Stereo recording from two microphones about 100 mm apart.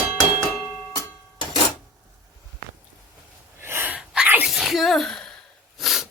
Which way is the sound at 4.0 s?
10° right (ahead or behind).